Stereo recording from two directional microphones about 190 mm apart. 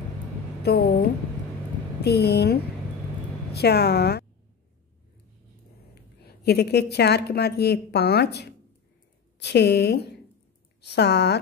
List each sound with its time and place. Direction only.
0.6 s a sound: 55° left (ahead or behind)
2.0 s a woman's voice: 60° left (ahead or behind)
6.2 s a woman's voice: 55° left (ahead or behind)